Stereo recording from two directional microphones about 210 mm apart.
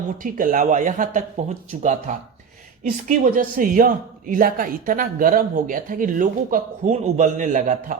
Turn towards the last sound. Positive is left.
turn(degrees=-35)  # may be behind; listen again after turning